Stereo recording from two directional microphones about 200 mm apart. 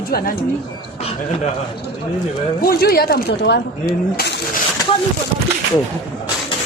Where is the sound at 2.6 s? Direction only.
50° left (ahead or behind).